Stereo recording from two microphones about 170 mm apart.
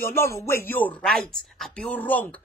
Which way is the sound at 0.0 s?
15° left (ahead or behind).